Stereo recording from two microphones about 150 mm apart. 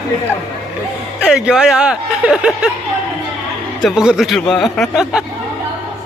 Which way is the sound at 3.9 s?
5° right (ahead or behind).